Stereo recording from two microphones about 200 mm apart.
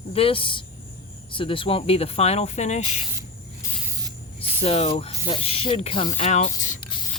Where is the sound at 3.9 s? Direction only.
20° right (ahead or behind).